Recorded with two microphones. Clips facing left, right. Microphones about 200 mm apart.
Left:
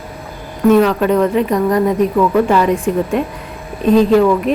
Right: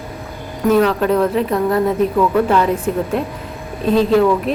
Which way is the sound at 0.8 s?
Centre (ahead or behind).